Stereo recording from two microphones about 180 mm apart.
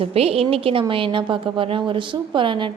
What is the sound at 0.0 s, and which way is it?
A woman's voice, 35° right (ahead or behind).